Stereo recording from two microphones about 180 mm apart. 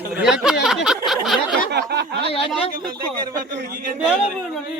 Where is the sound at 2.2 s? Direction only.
30° left (ahead or behind).